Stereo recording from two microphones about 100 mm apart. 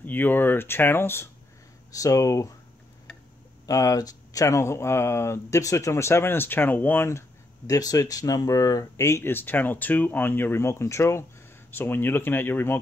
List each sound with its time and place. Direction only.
0.0 s speech: 20° left (ahead or behind)
3.6 s speech: 35° left (ahead or behind)